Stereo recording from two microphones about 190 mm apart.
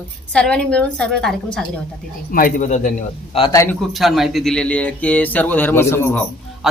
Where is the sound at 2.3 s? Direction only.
45° left (ahead or behind).